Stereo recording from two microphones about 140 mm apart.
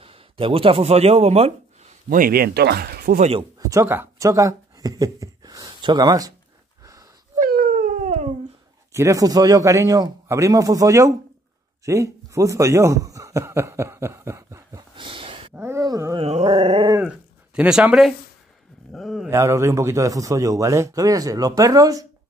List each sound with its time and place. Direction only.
0.0 s speech: 45° right (ahead or behind)
2.0 s speech: 90° right
3.3 s speech: 25° right (ahead or behind)
6.8 s a sound: 25° right (ahead or behind)
7.3 s a sound: 90° right
8.9 s a man's voice: 20° right (ahead or behind)
15.0 s a sound: 40° right (ahead or behind)
15.5 s groan: 20° right (ahead or behind)
16.2 s dog: 55° right (ahead or behind)
16.4 s dog: 35° right (ahead or behind)
17.0 s speech: 10° right (ahead or behind)
19.2 s a man's voice: 20° right (ahead or behind)